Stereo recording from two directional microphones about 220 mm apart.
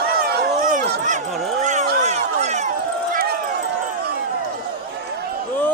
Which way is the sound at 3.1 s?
40° right (ahead or behind).